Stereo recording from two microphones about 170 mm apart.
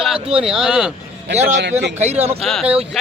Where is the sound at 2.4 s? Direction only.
Centre (ahead or behind).